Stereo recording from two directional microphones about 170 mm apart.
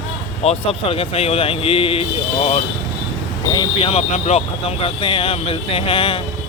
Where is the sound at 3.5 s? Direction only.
30° left (ahead or behind).